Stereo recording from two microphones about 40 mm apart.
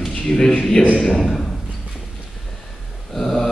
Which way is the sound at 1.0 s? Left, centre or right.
Centre.